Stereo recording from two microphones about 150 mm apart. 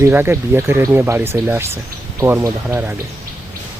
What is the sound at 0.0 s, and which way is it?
Speech, 15° right (ahead or behind).